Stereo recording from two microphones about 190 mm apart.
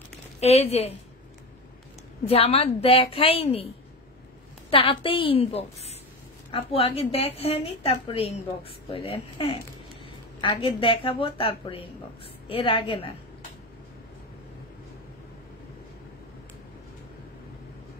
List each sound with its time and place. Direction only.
0.4 s a woman's voice: 35° left (ahead or behind)
2.2 s a woman's voice: 30° left (ahead or behind)
4.6 s a woman's voice: 30° left (ahead or behind)